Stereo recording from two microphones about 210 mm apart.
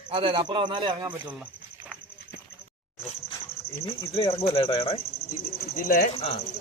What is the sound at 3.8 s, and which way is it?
Speech, 25° left (ahead or behind).